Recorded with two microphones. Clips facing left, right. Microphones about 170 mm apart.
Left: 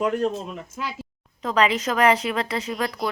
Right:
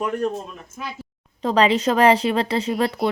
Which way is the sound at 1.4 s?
30° right (ahead or behind).